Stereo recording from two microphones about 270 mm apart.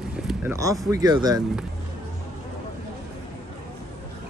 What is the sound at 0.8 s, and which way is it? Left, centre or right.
Speech, centre.